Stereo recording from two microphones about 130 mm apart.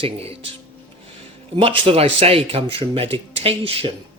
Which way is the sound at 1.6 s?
45° right (ahead or behind).